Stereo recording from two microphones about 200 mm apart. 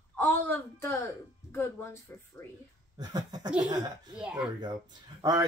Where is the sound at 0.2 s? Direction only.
10° left (ahead or behind).